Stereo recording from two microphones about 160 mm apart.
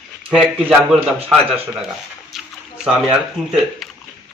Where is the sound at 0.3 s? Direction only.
5° right (ahead or behind).